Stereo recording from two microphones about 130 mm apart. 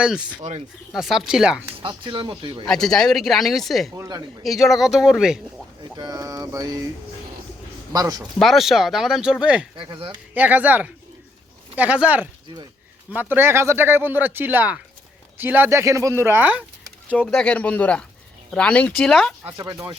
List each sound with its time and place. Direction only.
0.0 s speech: 5° right (ahead or behind)
1.9 s speech: 35° right (ahead or behind)
2.6 s speech: 5° left (ahead or behind)
3.9 s a sound: 25° right (ahead or behind)
4.4 s speech: centre (ahead or behind)
6.0 s a sound: 30° right (ahead or behind)
7.9 s a sound: 30° right (ahead or behind)
8.4 s speech: centre (ahead or behind)
9.7 s speech: 40° right (ahead or behind)
10.3 s speech: 10° right (ahead or behind)
17.1 s speech: 10° left (ahead or behind)
19.5 s a sound: 25° right (ahead or behind)